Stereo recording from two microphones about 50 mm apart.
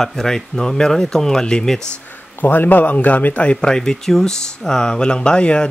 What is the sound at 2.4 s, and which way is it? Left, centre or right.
Speech, left.